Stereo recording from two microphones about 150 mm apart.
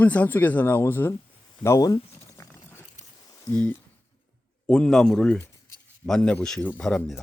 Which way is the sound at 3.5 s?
10° left (ahead or behind).